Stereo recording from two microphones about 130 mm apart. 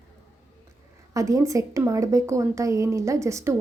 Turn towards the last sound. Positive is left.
turn(degrees=-20)  # may be behind; listen again after turning